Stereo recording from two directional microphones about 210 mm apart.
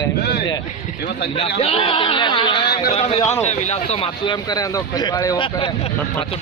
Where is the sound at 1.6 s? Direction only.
30° left (ahead or behind).